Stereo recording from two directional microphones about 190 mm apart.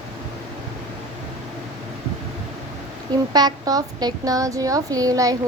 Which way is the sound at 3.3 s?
20° right (ahead or behind).